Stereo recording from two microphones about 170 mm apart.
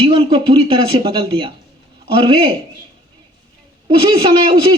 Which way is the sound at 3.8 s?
30° right (ahead or behind).